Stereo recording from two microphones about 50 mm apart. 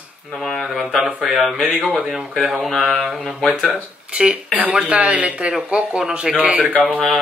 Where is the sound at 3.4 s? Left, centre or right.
Right.